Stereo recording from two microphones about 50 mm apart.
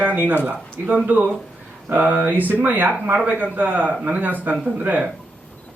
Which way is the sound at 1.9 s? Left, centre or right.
Right.